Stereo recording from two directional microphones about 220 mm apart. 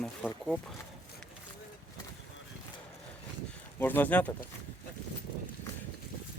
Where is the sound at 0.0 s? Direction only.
Centre (ahead or behind).